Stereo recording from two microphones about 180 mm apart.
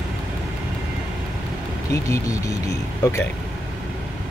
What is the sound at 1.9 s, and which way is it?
Speech, 20° left (ahead or behind).